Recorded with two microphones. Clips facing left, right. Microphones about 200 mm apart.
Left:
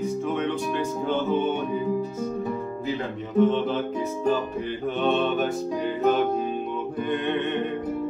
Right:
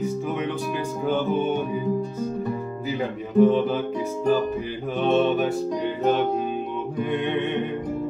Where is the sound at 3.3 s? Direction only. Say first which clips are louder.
Right 3 dB; 10° right (ahead or behind).